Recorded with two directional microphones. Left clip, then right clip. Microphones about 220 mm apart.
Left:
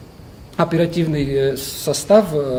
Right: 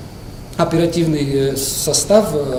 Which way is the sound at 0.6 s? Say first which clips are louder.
Right 2 dB; 40° right (ahead or behind).